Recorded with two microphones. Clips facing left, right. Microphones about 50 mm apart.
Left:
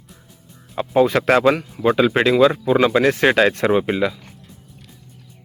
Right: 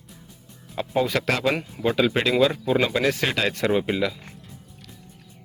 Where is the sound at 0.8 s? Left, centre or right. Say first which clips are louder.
Left 7 dB; left.